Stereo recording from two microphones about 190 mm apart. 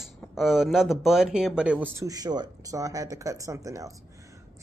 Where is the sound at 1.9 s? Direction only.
20° right (ahead or behind).